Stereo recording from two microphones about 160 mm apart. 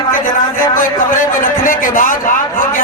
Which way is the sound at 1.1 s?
55° left (ahead or behind).